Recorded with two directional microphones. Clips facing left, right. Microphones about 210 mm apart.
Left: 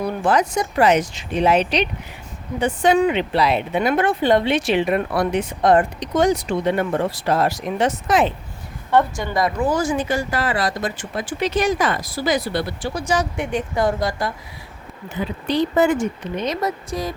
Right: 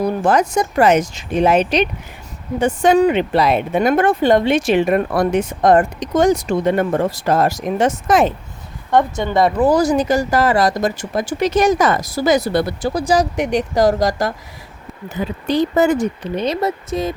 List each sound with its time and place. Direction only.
0.0 s speech: 45° right (ahead or behind)
8.9 s a woman's voice: 20° right (ahead or behind)
9.6 s speech: 35° right (ahead or behind)
13.3 s speech: 85° right
14.1 s speech: 40° right (ahead or behind); by 17.2 s 25° right (ahead or behind)